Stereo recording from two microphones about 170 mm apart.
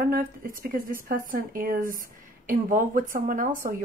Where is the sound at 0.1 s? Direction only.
60° right (ahead or behind).